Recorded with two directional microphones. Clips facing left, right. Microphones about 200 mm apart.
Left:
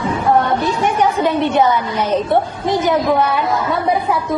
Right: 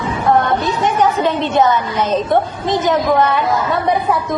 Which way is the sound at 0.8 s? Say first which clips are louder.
Right 2 dB; 10° left (ahead or behind).